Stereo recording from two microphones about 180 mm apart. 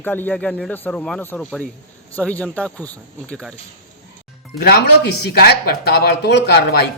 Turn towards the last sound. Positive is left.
turn(degrees=65)  # may be behind; listen again after turning